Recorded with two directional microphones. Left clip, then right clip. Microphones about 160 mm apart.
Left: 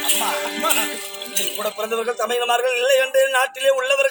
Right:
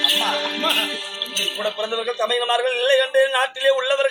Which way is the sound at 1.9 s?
15° left (ahead or behind).